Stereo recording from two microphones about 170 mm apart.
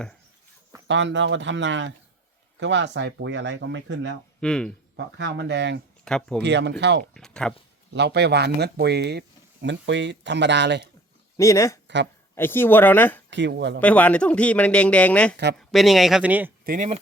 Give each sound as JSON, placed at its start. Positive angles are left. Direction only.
{"t": 0.9, "sound": "speech", "side_deg": -90}
{"t": 4.4, "sound": "speech", "side_deg": 5}
{"t": 4.9, "sound": "speech", "side_deg": -90}
{"t": 6.1, "sound": "speech", "side_deg": 5}
{"t": 6.4, "sound": "speech", "side_deg": -90}
{"t": 7.1, "sound": "speech", "side_deg": 5}
{"t": 7.9, "sound": "speech", "side_deg": -80}
{"t": 11.3, "sound": "speech", "side_deg": 20}
{"t": 13.3, "sound": "speech", "side_deg": -90}
{"t": 13.8, "sound": "speech", "side_deg": 10}
{"t": 16.6, "sound": "speech", "side_deg": -50}